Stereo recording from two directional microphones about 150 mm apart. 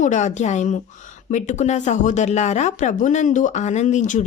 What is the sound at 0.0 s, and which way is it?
Speech, 55° left (ahead or behind).